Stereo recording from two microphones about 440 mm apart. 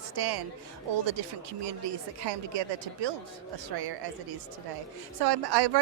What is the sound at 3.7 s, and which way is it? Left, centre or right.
Speech, right.